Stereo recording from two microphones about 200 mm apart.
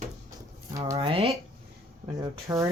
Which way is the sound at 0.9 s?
30° right (ahead or behind).